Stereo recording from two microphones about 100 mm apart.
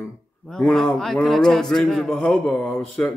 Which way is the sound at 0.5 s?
5° left (ahead or behind).